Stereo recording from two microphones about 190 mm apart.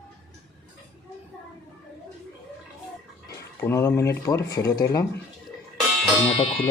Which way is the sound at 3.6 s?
15° left (ahead or behind).